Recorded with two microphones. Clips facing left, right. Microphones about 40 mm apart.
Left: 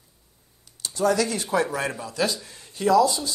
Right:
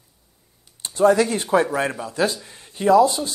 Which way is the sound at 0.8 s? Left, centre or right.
Right.